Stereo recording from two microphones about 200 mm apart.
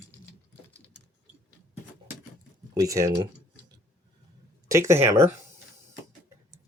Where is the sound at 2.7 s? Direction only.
15° right (ahead or behind).